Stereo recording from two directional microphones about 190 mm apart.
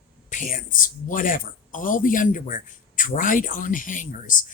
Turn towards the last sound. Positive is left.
turn(degrees=45)  # may be behind; listen again after turning